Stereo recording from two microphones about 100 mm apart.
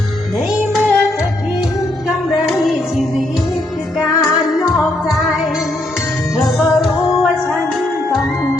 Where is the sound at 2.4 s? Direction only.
Centre (ahead or behind).